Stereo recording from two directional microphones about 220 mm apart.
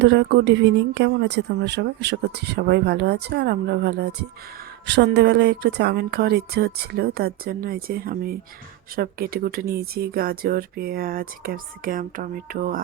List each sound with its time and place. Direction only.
0.0 s speech: 55° right (ahead or behind)